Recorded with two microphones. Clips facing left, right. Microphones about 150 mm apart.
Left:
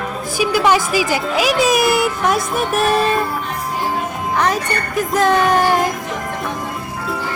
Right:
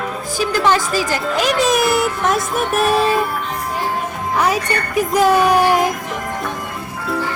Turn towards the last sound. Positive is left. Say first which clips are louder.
# right 1 dB
turn(degrees=-5)  # may be behind; listen again after turning